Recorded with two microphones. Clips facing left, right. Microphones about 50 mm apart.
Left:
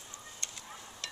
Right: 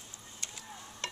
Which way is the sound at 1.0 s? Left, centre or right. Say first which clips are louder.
Right 5 dB; right.